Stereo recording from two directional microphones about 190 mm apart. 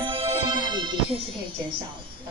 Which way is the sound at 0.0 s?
30° right (ahead or behind).